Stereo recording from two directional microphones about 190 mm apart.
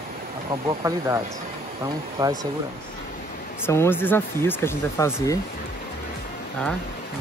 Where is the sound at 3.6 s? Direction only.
15° left (ahead or behind).